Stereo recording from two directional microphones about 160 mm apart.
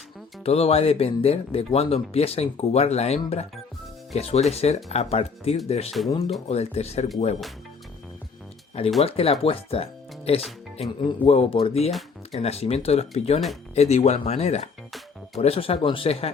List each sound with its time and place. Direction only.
0.4 s speech: 40° left (ahead or behind)
9.0 s speech: 40° left (ahead or behind)
11.9 s music: centre (ahead or behind)
12.4 s speech: 40° left (ahead or behind)